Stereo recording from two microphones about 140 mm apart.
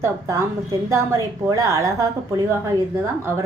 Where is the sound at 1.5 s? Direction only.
20° right (ahead or behind).